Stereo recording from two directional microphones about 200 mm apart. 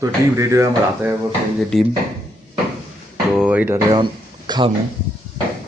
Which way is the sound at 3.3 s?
5° right (ahead or behind).